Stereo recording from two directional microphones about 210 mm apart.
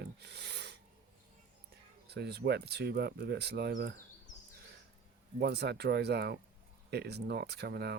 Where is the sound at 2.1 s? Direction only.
50° right (ahead or behind).